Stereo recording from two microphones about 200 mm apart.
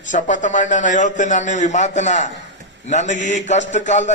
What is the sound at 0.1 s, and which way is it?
Mantra, 40° left (ahead or behind).